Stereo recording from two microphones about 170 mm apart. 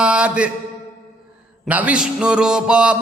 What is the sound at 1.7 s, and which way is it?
A man's voice, 10° right (ahead or behind).